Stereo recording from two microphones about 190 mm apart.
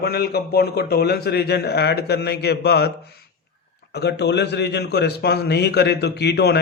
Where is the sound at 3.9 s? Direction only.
60° left (ahead or behind).